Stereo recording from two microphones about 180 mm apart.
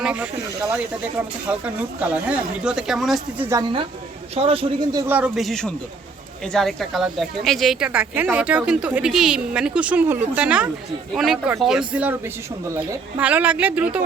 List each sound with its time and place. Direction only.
0.0 s speech: 5° right (ahead or behind)
1.5 s speech: 5° right (ahead or behind)
4.4 s speech: 30° right (ahead or behind)
5.1 s a woman's voice: 5° right (ahead or behind)